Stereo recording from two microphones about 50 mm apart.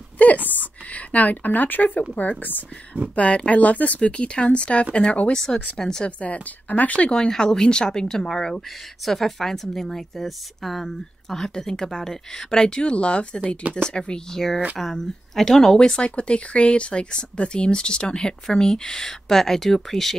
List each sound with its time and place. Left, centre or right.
0.2 s a sound: left
0.8 s speech: left
3.2 s speech: left
5.3 s a woman's voice: centre
6.0 s speech: left
7.1 s a woman's voice: centre
16.0 s a woman's voice: left; by 20.2 s centre